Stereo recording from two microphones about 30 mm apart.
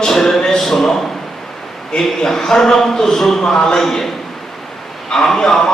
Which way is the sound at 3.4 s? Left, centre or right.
Left.